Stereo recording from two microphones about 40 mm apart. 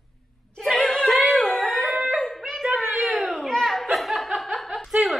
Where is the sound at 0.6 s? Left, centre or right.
Centre.